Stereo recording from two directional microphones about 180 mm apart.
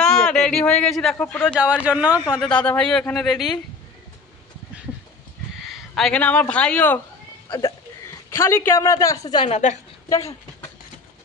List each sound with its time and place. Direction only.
0.0 s a sound: 5° left (ahead or behind)
1.1 s speech: 10° left (ahead or behind)
1.9 s speech: 10° right (ahead or behind)
2.5 s speech: 5° left (ahead or behind)
5.7 s speech: centre (ahead or behind)
7.4 s speech: 25° left (ahead or behind)
8.4 s speech: 15° left (ahead or behind)
9.5 s a woman's voice: 40° left (ahead or behind)
10.0 s speech: 15° left (ahead or behind)